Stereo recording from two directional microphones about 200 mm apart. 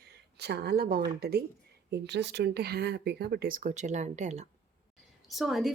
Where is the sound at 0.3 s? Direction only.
55° right (ahead or behind); by 4.4 s 35° right (ahead or behind).